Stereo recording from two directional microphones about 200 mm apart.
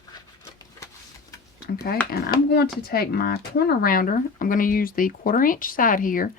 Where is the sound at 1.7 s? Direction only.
50° left (ahead or behind).